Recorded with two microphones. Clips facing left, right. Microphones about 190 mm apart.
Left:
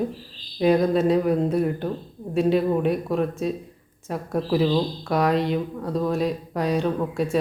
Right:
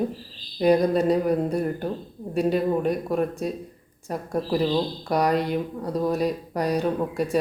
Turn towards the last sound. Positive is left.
turn(degrees=0)  # may be behind; listen again after turning